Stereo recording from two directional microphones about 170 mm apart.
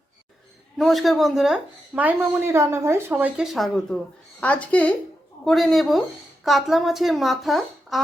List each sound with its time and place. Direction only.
0.8 s speech: centre (ahead or behind)